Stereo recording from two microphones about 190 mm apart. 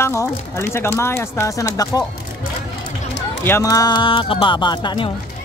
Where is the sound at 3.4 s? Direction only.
15° left (ahead or behind).